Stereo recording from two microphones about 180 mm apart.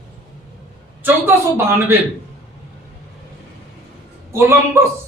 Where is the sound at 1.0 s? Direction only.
10° right (ahead or behind).